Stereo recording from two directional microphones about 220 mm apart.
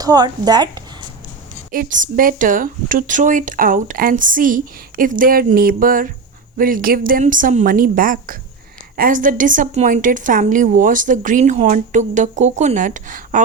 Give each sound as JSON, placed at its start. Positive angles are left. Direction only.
{"t": 0.0, "sound": "a woman's voice", "side_deg": -15}
{"t": 1.7, "sound": "a woman's voice", "side_deg": -40}